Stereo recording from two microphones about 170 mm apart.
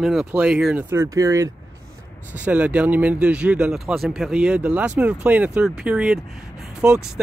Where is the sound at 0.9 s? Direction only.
20° right (ahead or behind).